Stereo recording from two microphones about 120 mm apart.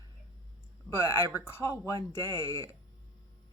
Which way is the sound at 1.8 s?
25° left (ahead or behind).